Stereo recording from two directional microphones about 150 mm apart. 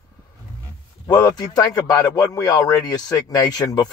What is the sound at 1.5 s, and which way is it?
Speech, 25° left (ahead or behind).